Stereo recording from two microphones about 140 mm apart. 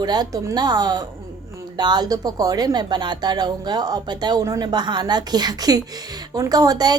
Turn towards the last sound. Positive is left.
turn(degrees=-25)  # may be behind; listen again after turning